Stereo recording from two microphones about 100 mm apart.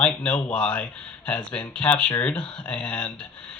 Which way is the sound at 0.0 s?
15° left (ahead or behind).